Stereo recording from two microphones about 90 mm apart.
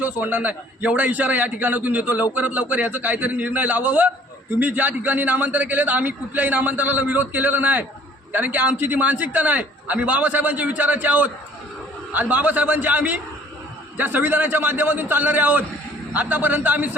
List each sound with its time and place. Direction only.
0.0 s a man's voice: 20° right (ahead or behind)